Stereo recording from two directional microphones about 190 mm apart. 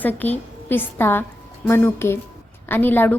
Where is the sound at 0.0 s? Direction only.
10° left (ahead or behind).